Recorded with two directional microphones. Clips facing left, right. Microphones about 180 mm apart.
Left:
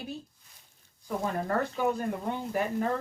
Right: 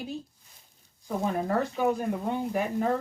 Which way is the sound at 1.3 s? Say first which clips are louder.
Right 2 dB; 10° right (ahead or behind).